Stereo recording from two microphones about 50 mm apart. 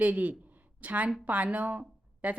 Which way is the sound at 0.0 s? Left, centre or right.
Right.